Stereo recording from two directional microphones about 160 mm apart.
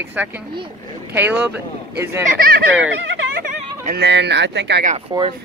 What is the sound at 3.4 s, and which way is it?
Speech, 75° right (ahead or behind).